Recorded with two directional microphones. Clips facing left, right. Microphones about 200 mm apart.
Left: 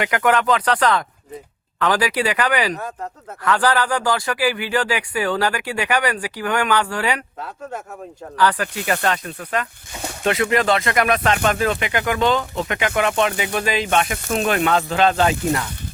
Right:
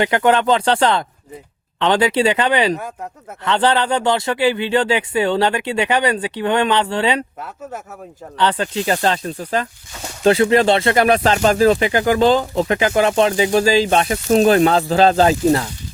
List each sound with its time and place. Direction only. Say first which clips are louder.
0.0 s speech: right 3 dB; 30° right (ahead or behind)
2.7 s speech: right 1 dB; 10° right (ahead or behind)
3.4 s speech: right 2 dB; 25° right (ahead or behind)
8.4 s speech: right 1 dB; 25° right (ahead or behind)